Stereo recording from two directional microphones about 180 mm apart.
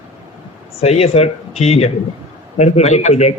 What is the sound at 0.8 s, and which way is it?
A man's voice, 35° left (ahead or behind).